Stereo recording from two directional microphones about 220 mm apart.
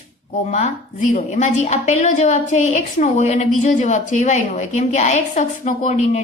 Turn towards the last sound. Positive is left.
turn(degrees=30)  # may be behind; listen again after turning